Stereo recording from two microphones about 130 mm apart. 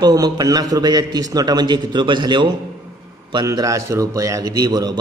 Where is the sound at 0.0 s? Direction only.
30° right (ahead or behind).